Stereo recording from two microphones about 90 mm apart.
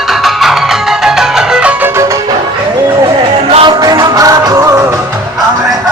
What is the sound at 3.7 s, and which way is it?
Music, 45° right (ahead or behind).